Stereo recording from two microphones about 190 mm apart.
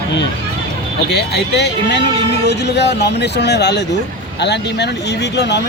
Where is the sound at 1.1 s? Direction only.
60° left (ahead or behind).